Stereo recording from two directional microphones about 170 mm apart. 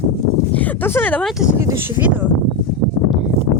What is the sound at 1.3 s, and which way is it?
Speech, 5° right (ahead or behind).